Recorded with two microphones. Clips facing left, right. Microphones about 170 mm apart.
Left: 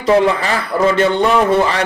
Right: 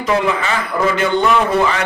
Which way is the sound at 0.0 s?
30° left (ahead or behind).